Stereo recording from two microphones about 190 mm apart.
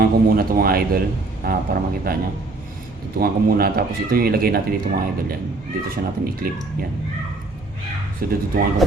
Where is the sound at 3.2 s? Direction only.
55° right (ahead or behind).